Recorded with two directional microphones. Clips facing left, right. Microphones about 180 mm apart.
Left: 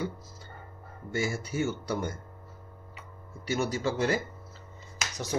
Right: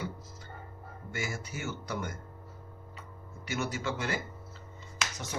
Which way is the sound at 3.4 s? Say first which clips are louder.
Left 5 dB; 35° left (ahead or behind).